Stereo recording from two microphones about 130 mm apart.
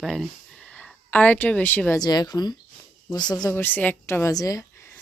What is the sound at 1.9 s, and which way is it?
Speech, 30° left (ahead or behind).